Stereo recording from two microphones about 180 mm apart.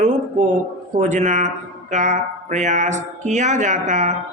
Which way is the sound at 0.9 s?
40° right (ahead or behind).